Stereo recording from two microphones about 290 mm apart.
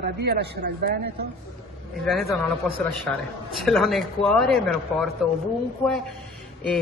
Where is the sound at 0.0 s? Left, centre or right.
Right.